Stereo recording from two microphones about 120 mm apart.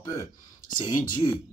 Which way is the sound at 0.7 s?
35° left (ahead or behind).